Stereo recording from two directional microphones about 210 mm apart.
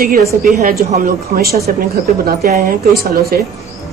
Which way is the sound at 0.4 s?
40° right (ahead or behind).